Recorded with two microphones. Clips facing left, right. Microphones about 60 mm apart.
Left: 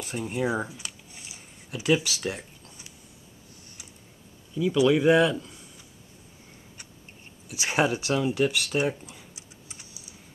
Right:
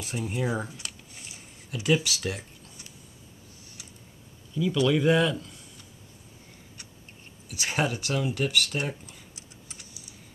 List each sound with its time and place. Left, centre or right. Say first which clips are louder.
0.3 s speech: left 3 dB; centre
0.7 s a sound: even; centre
1.7 s speech: left 1 dB; centre
2.0 s speech: even; left
4.6 s speech: left 3 dB; centre
7.5 s speech: left 3 dB; centre